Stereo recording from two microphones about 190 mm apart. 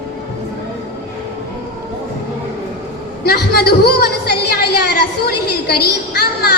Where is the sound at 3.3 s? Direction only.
55° left (ahead or behind).